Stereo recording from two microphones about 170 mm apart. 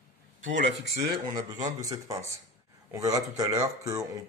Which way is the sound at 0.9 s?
75° right (ahead or behind).